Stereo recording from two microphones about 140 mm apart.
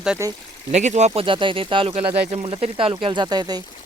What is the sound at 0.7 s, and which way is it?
Speech, 55° right (ahead or behind).